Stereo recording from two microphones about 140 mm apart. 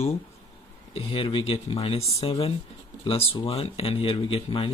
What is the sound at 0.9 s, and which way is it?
Speech, 40° left (ahead or behind).